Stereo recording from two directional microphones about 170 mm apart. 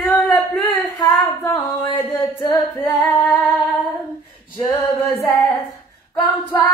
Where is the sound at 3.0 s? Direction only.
10° left (ahead or behind).